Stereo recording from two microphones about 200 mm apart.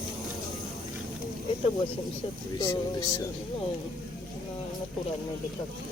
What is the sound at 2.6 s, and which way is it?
Speech, 15° left (ahead or behind).